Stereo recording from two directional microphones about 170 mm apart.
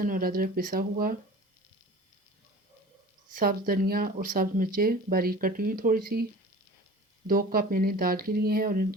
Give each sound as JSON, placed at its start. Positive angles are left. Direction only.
{"t": 0.0, "sound": "speech", "side_deg": -55}
{"t": 3.2, "sound": "speech", "side_deg": -55}
{"t": 7.3, "sound": "speech", "side_deg": -55}